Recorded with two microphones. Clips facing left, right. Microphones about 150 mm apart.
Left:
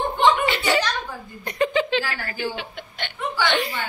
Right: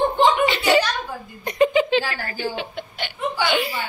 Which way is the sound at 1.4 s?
15° right (ahead or behind).